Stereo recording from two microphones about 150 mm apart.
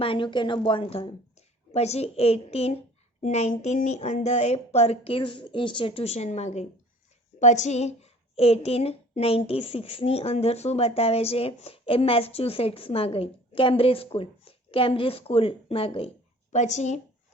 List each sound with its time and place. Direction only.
0.0 s a woman's voice: 35° left (ahead or behind); by 17.0 s 50° left (ahead or behind)